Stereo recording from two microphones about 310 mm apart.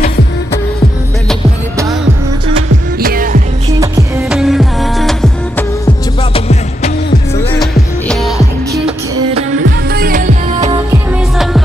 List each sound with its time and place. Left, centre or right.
3.0 s music: right
3.8 s music: centre
6.3 s music: left
7.7 s music: centre
9.1 s music: right
9.8 s music: right